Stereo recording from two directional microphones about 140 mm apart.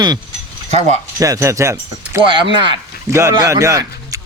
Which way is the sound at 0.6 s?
50° right (ahead or behind).